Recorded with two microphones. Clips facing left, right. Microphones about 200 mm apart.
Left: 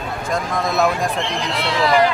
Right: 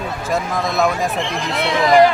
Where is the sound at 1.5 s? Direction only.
50° right (ahead or behind).